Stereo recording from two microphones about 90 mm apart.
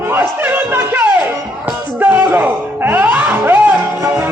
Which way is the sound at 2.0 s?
20° right (ahead or behind).